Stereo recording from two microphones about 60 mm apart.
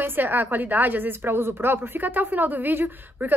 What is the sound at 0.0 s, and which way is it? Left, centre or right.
A woman's voice, right.